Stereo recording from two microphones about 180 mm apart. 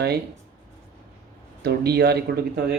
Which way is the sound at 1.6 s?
65° right (ahead or behind).